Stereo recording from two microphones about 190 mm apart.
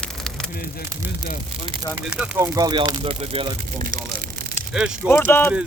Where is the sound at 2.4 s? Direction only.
20° right (ahead or behind).